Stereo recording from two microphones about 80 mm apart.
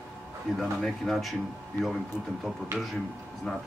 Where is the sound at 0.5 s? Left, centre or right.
Centre.